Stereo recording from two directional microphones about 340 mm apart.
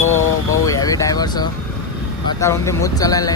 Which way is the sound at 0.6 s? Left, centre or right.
Centre.